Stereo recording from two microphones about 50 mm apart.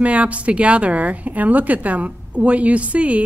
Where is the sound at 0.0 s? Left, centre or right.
Right.